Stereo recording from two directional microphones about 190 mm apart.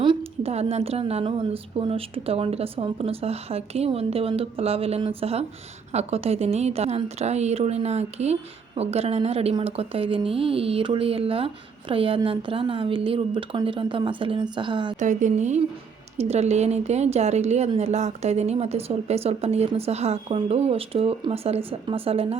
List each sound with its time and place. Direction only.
0.0 s a woman's voice: 30° right (ahead or behind)
14.9 s speech: 40° right (ahead or behind)